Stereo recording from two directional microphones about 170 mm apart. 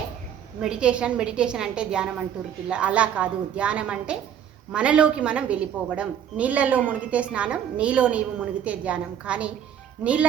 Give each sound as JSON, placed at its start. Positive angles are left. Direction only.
{"t": 0.6, "sound": "a woman's voice", "side_deg": -5}